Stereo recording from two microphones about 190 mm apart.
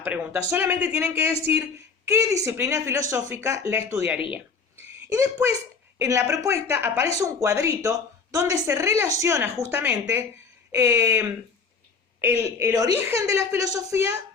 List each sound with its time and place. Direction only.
0.0 s a woman's voice: 10° right (ahead or behind)